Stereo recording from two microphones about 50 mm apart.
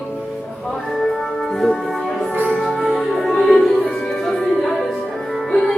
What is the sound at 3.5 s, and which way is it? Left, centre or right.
Music, centre.